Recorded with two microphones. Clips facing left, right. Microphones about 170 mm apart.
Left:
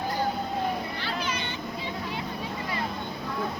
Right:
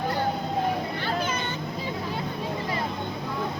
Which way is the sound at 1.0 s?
50° right (ahead or behind).